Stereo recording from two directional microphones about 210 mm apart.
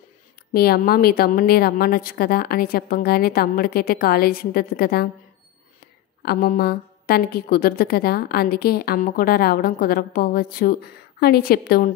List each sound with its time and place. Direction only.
0.5 s a woman's voice: 45° left (ahead or behind)
6.2 s a woman's voice: 45° left (ahead or behind)